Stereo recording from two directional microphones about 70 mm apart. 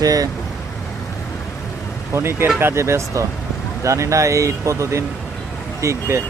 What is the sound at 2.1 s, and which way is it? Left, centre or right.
Speech, right.